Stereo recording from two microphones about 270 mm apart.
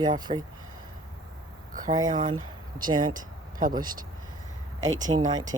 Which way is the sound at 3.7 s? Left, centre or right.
Centre.